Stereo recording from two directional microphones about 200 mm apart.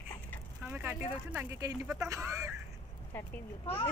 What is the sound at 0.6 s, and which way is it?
Speech, 10° right (ahead or behind).